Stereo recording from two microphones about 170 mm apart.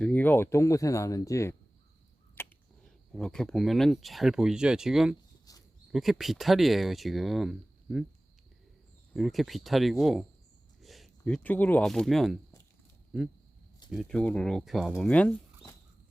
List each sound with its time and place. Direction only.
0.0 s speech: 10° left (ahead or behind)
5.5 s a sound: 20° left (ahead or behind)
5.9 s speech: centre (ahead or behind)
9.1 s speech: centre (ahead or behind)
10.8 s a sound: centre (ahead or behind)
11.4 s speech: 10° left (ahead or behind)
13.9 s speech: 5° left (ahead or behind)